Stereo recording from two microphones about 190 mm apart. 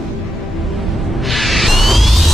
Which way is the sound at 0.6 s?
Centre (ahead or behind).